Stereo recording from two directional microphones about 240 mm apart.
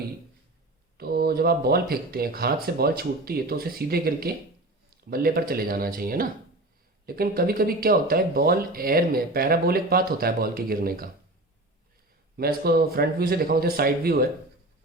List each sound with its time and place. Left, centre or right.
0.9 s speech: right
12.4 s speech: right